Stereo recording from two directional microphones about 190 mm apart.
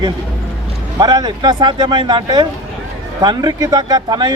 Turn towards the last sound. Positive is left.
turn(degrees=-20)  # may be behind; listen again after turning